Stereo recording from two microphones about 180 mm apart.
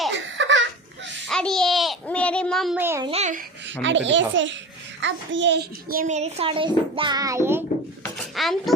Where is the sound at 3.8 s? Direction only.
90° right; by 7.6 s 15° right (ahead or behind).